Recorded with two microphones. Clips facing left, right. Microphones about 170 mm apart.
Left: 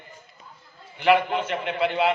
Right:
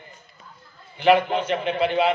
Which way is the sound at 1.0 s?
20° right (ahead or behind).